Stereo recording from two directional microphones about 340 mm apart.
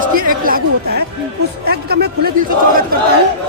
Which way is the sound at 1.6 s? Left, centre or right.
Right.